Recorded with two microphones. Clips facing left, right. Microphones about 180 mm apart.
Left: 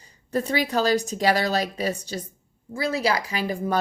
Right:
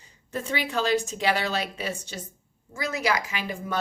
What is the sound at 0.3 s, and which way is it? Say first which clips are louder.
Speech: left 5 dB; 40° left (ahead or behind).